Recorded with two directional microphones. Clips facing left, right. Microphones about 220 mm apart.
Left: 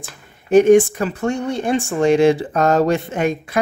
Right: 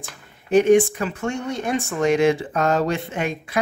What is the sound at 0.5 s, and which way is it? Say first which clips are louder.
Speech: left 4 dB; 45° left (ahead or behind).